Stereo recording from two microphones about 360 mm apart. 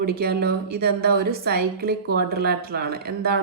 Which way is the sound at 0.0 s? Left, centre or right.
Right.